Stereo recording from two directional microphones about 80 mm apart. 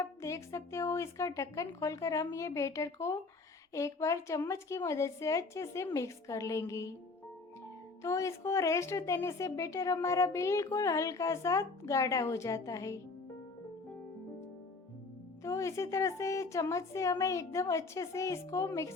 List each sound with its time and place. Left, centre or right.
0.0 s a woman's voice: left
8.0 s a woman's voice: left
15.4 s a woman's voice: left